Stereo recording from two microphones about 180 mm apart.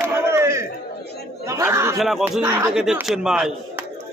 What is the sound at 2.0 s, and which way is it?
Speech, centre (ahead or behind).